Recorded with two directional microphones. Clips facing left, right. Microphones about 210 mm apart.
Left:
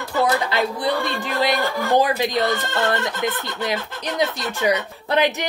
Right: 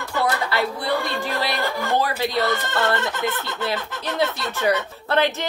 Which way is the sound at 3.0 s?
15° left (ahead or behind).